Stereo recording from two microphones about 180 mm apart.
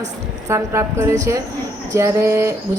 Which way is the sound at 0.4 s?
15° right (ahead or behind).